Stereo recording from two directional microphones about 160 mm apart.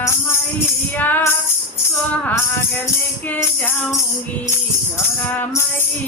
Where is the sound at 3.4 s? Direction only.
15° left (ahead or behind).